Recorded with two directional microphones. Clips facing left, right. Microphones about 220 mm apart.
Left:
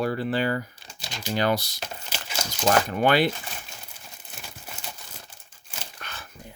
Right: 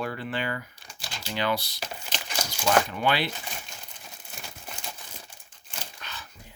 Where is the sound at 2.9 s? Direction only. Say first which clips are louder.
Left 6 dB; 50° left (ahead or behind).